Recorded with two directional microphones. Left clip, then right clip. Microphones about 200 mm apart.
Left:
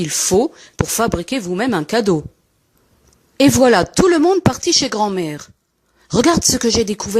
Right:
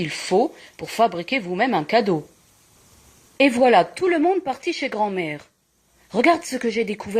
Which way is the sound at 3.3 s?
55° left (ahead or behind).